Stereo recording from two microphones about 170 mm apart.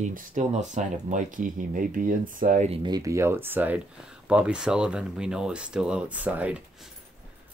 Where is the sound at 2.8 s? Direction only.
20° right (ahead or behind).